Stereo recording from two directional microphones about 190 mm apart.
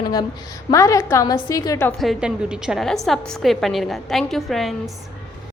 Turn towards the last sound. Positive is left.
turn(degrees=0)  # may be behind; listen again after turning